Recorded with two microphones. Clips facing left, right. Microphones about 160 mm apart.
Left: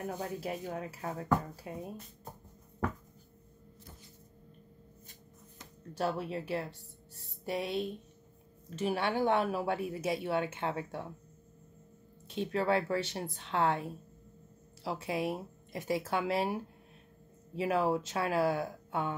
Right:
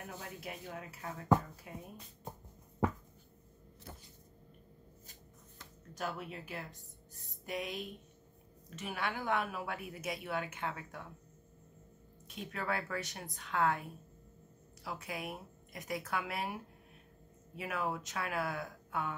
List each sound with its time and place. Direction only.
0.1 s speech: 35° left (ahead or behind)
5.6 s a woman's voice: 30° left (ahead or behind)
12.3 s a woman's voice: 30° left (ahead or behind)
17.6 s a woman's voice: 30° left (ahead or behind)